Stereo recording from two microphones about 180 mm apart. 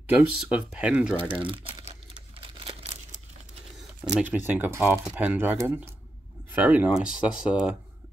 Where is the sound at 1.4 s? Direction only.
30° right (ahead or behind).